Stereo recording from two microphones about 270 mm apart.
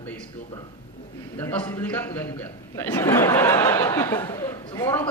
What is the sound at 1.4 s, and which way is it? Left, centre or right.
A man's voice, centre.